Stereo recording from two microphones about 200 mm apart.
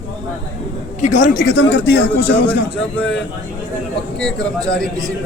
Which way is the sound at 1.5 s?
55° left (ahead or behind).